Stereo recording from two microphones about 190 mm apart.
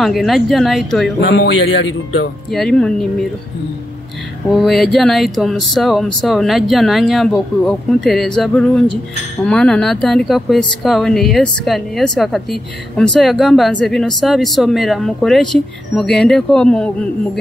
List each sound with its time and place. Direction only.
0.0 s speech: centre (ahead or behind)
1.3 s a man's voice: 70° left (ahead or behind)
2.5 s speech: centre (ahead or behind)
4.6 s speech: centre (ahead or behind)